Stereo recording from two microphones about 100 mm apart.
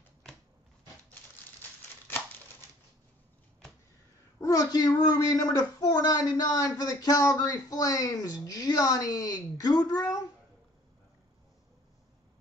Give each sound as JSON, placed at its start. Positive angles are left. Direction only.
{"t": 4.4, "sound": "speech", "side_deg": 35}